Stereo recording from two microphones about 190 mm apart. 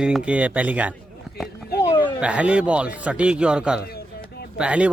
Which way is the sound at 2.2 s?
5° right (ahead or behind).